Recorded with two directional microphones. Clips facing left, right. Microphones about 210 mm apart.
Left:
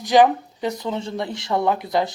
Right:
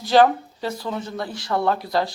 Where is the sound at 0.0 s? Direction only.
15° left (ahead or behind).